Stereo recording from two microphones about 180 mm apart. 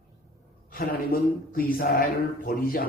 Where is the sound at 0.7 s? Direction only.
55° left (ahead or behind).